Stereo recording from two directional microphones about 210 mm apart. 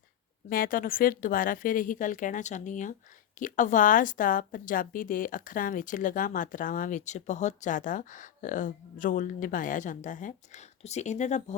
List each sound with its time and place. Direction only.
0.5 s a woman's voice: 45° left (ahead or behind)